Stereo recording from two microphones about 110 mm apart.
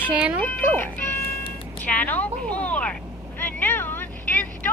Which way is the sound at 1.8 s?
15° left (ahead or behind).